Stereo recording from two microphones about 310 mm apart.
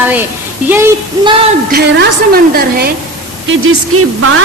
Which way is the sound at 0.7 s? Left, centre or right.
Centre.